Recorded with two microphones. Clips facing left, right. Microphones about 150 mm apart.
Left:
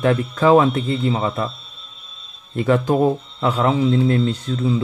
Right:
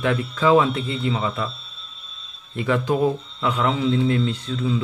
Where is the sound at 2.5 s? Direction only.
45° left (ahead or behind).